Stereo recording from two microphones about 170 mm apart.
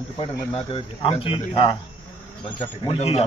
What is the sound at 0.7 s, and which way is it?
A man's voice, 30° left (ahead or behind).